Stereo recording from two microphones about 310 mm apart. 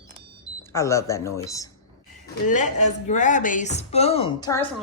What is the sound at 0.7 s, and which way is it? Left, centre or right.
Speech, centre.